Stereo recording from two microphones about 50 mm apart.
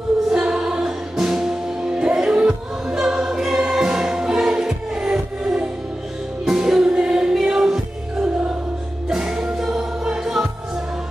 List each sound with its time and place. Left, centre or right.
0.3 s music: centre